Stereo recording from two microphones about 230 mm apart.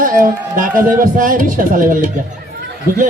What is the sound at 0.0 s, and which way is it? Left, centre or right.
Speech, right.